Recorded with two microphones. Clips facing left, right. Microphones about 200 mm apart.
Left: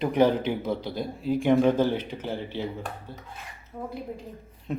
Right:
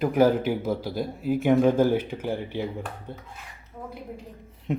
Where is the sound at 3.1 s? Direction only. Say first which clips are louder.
Right 3 dB; 20° right (ahead or behind).